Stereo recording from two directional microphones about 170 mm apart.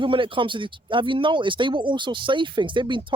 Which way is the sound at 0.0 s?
30° right (ahead or behind).